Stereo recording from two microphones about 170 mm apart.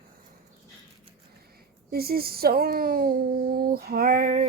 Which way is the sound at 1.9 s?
65° right (ahead or behind).